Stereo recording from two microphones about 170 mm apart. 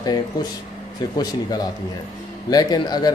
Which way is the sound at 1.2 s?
25° left (ahead or behind).